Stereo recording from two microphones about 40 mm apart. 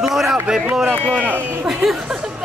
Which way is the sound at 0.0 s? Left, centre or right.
Centre.